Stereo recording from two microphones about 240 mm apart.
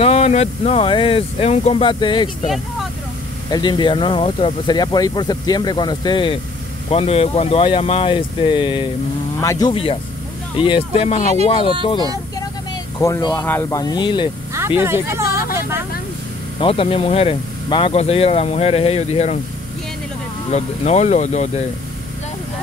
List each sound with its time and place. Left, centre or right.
0.0 s speech: left
2.4 s speech: centre
3.4 s speech: centre
13.0 s speech: centre
14.8 s speech: centre
16.5 s speech: left
20.5 s speech: left